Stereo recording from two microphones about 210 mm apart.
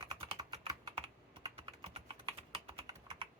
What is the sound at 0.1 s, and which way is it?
Typing, 20° right (ahead or behind).